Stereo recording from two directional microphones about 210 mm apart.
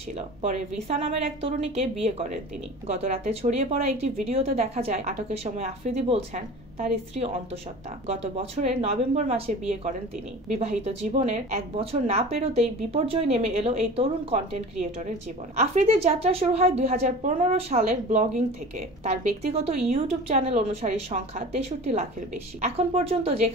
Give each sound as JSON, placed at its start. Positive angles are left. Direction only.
{"t": 0.4, "sound": "a woman's voice", "side_deg": -30}
{"t": 19.5, "sound": "a woman's voice", "side_deg": -30}